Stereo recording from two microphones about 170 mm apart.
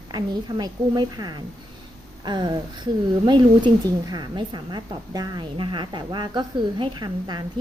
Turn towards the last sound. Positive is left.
turn(degrees=-25)  # may be behind; listen again after turning